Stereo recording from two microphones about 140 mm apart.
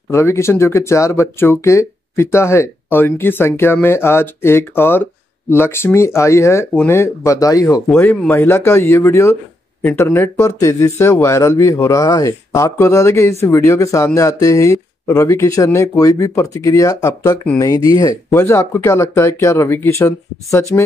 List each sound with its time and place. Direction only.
0.1 s speech: 20° left (ahead or behind)